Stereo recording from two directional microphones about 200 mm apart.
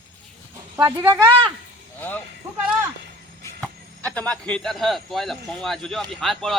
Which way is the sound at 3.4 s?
5° left (ahead or behind).